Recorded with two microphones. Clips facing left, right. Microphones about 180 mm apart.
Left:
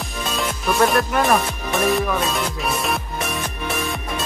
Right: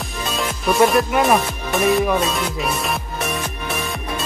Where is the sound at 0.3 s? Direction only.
Centre (ahead or behind).